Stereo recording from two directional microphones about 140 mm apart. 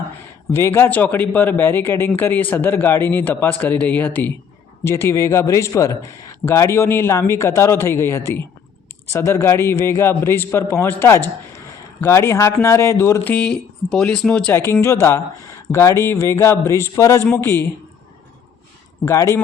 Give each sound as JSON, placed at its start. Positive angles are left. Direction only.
{"t": 0.5, "sound": "a man's voice", "side_deg": 15}
{"t": 11.5, "sound": "a sound", "side_deg": 20}
{"t": 12.6, "sound": "a man's voice", "side_deg": 20}
{"t": 13.3, "sound": "speech", "side_deg": 5}
{"t": 14.7, "sound": "a man's voice", "side_deg": 20}
{"t": 19.0, "sound": "a man's voice", "side_deg": 20}